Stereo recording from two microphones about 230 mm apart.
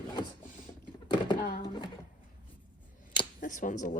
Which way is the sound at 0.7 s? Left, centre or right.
Centre.